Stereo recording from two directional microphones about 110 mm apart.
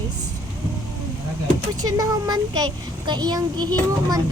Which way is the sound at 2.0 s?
35° right (ahead or behind).